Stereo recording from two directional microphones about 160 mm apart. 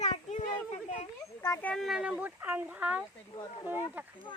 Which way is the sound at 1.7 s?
Centre (ahead or behind).